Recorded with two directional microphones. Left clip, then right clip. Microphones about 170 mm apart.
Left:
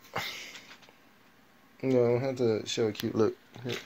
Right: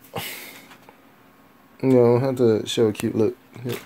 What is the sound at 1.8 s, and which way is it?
Speech, 20° right (ahead or behind).